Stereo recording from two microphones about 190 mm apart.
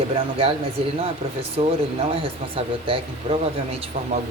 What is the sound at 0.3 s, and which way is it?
Speech, 30° right (ahead or behind).